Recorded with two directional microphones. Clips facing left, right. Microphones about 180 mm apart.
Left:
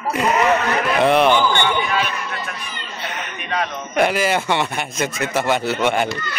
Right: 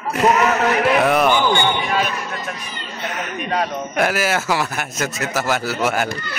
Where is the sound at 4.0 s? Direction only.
5° right (ahead or behind).